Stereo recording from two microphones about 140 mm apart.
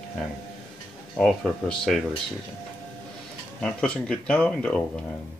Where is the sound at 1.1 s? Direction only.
5° left (ahead or behind).